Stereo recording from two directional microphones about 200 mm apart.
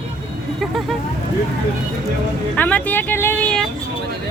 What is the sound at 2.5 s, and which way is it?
Speech, 10° left (ahead or behind).